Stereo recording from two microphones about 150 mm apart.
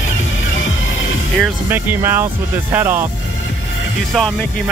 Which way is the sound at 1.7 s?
15° right (ahead or behind).